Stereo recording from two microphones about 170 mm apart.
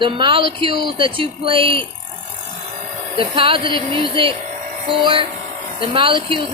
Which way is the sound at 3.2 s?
30° right (ahead or behind).